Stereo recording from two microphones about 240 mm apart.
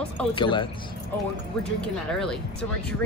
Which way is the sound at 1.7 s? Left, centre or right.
Centre.